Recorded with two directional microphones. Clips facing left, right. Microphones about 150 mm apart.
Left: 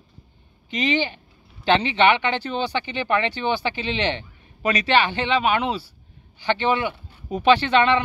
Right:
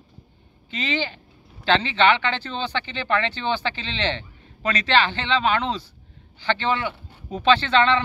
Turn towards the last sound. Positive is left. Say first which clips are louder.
# left 1 dB
turn(degrees=15)  # may be behind; listen again after turning